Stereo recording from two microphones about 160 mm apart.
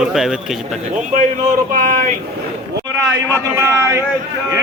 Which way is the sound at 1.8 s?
60° right (ahead or behind).